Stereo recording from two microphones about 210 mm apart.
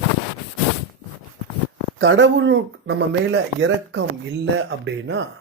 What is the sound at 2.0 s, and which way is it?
Speech, 65° right (ahead or behind).